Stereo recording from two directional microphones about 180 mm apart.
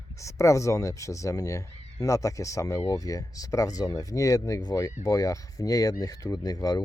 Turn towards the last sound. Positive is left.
turn(degrees=20)  # may be behind; listen again after turning